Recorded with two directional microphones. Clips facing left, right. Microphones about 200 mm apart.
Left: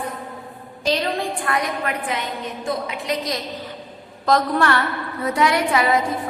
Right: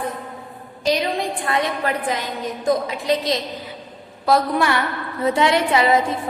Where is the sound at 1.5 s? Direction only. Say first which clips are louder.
Right 4 dB; 25° right (ahead or behind).